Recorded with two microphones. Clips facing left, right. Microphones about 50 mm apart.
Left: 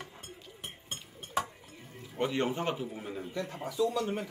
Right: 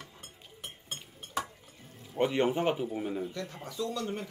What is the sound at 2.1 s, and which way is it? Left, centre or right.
Speech, centre.